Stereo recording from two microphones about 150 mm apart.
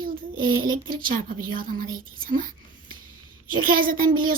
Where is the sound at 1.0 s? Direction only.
70° right (ahead or behind).